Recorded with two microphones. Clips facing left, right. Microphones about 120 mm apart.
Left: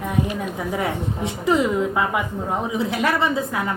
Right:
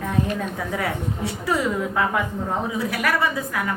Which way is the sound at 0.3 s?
20° left (ahead or behind).